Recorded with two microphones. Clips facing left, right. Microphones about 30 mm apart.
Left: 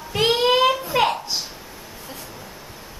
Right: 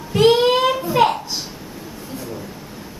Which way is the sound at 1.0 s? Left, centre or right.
Centre.